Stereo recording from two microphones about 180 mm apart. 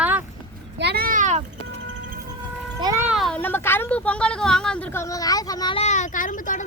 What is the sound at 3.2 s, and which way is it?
Speech, 5° left (ahead or behind).